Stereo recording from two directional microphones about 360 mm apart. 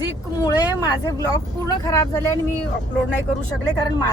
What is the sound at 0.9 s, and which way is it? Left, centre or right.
Speech, centre.